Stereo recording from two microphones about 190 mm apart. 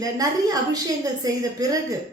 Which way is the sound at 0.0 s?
20° right (ahead or behind).